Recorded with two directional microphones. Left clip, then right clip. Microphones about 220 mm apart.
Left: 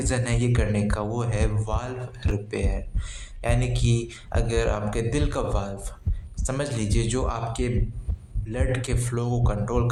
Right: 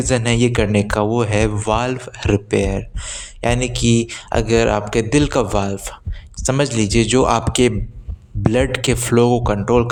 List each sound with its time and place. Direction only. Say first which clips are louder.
0.0 s speech: right 10 dB; 35° right (ahead or behind)